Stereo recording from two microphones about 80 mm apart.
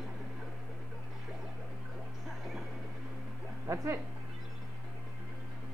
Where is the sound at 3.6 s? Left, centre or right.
Right.